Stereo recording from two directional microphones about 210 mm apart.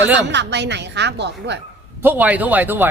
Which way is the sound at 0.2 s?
55° right (ahead or behind).